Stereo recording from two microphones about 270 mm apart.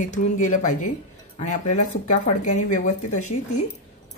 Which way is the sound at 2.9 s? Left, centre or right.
Left.